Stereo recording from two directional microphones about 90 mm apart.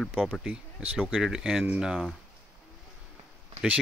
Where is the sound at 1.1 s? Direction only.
5° right (ahead or behind).